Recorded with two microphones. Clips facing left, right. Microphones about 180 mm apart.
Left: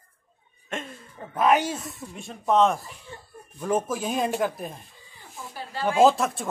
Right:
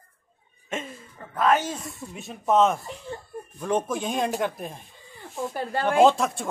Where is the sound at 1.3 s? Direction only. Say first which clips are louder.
Left 1 dB; 15° left (ahead or behind).